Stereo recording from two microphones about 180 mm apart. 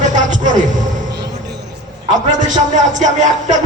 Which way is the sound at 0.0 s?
45° right (ahead or behind).